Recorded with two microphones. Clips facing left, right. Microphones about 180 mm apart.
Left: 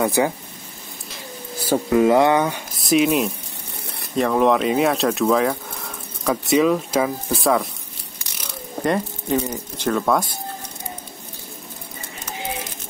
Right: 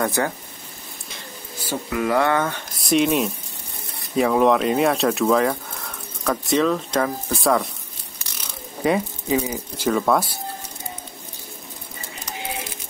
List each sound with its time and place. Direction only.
0.0 s speech: 10° left (ahead or behind)
1.6 s speech: 35° left (ahead or behind); by 2.6 s 15° left (ahead or behind)
2.8 s speech: centre (ahead or behind)
8.8 s speech: 5° right (ahead or behind)